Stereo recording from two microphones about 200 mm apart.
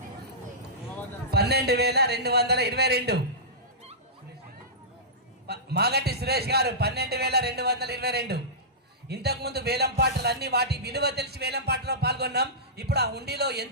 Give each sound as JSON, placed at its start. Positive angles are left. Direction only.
{"t": 1.3, "sound": "a man's voice", "side_deg": -55}
{"t": 5.5, "sound": "a man's voice", "side_deg": -55}